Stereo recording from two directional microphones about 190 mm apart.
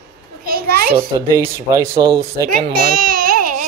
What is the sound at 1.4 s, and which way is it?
Speech, 15° right (ahead or behind).